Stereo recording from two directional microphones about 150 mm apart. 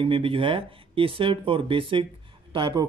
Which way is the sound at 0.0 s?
35° right (ahead or behind).